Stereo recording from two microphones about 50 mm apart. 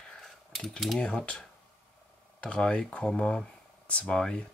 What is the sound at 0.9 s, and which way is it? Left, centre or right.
Speech, centre.